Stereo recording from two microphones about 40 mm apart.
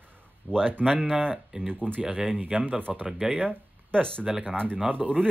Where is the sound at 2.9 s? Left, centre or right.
Centre.